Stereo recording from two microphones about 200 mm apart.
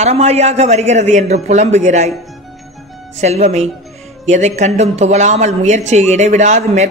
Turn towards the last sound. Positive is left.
turn(degrees=-35)  # may be behind; listen again after turning